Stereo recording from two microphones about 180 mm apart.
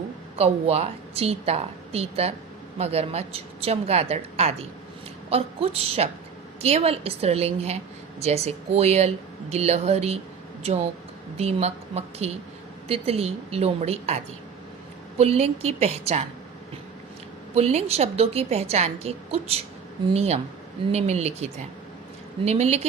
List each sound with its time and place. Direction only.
0.3 s a woman's voice: 35° right (ahead or behind)
15.2 s a woman's voice: 35° right (ahead or behind)
17.5 s a woman's voice: 35° right (ahead or behind)